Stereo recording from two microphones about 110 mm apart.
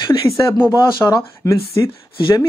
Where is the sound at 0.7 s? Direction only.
40° left (ahead or behind).